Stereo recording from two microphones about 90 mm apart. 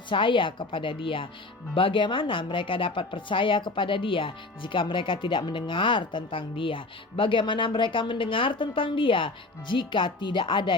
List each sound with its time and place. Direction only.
0.1 s speech: 70° left (ahead or behind)